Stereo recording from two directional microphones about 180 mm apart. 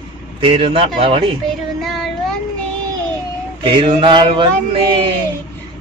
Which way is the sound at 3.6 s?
25° right (ahead or behind).